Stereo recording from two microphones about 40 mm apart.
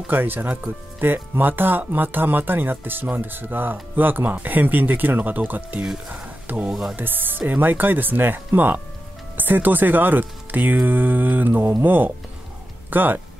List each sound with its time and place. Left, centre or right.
0.1 s speech: right
6.7 s speech: centre
7.0 s speech: right